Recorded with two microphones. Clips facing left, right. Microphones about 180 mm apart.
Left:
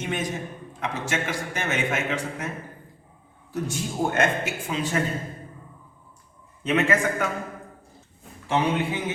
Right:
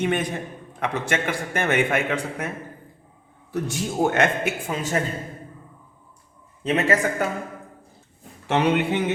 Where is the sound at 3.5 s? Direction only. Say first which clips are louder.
Right 3 dB; 70° right (ahead or behind).